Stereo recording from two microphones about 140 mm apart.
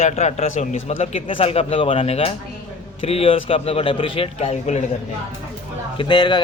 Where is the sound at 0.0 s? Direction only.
55° left (ahead or behind).